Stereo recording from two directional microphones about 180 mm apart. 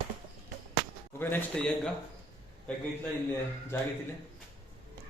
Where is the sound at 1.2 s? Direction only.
10° left (ahead or behind).